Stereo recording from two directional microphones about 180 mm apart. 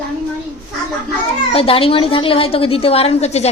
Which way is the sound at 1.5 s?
30° left (ahead or behind).